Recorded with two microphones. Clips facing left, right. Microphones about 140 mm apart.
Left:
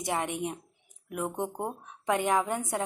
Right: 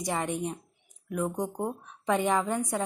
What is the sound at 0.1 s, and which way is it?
Speech, 10° left (ahead or behind).